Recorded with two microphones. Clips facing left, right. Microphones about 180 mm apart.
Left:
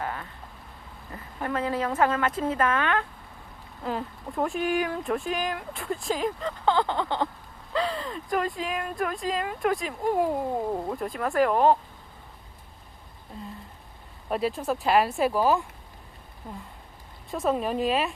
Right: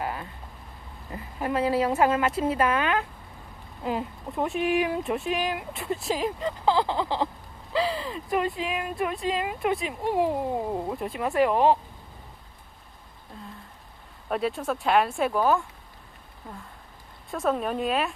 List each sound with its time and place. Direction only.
0.0 s a sound: 15° right (ahead or behind)
1.1 s a woman's voice: 15° right (ahead or behind)
4.4 s speech: centre (ahead or behind)
14.3 s speech: centre (ahead or behind)
17.3 s speech: centre (ahead or behind)